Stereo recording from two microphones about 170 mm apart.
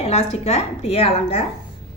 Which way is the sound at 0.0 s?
40° left (ahead or behind).